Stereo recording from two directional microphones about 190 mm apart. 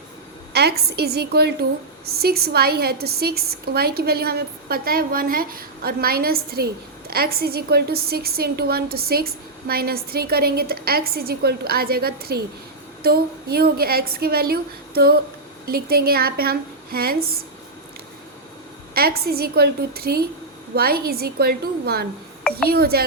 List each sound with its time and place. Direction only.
0.5 s a woman's voice: 60° right (ahead or behind)
18.9 s a woman's voice: 55° right (ahead or behind)